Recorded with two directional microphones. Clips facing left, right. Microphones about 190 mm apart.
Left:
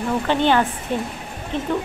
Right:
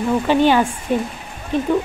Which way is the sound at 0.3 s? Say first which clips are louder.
Right 3 dB; 10° right (ahead or behind).